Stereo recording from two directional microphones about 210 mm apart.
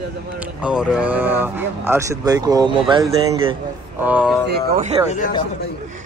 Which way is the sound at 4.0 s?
5° right (ahead or behind).